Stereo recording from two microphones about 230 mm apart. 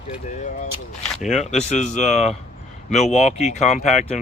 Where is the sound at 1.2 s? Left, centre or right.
Left.